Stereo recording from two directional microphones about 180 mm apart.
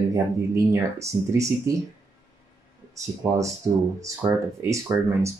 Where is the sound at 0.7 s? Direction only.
15° right (ahead or behind).